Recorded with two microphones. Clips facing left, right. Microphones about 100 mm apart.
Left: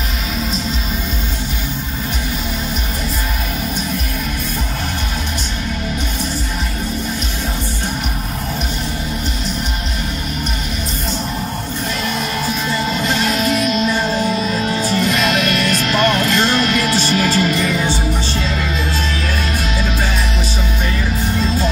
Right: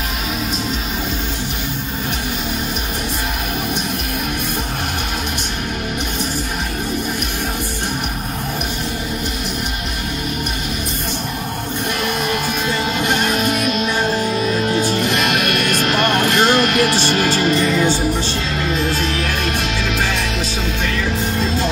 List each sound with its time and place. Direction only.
13.0 s music: 50° right (ahead or behind)
15.0 s music: 50° right (ahead or behind)
18.8 s music: 50° right (ahead or behind)
19.8 s music: 70° right (ahead or behind)